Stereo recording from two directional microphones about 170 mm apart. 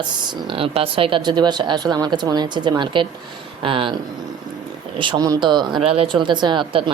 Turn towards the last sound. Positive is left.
turn(degrees=-30)  # may be behind; listen again after turning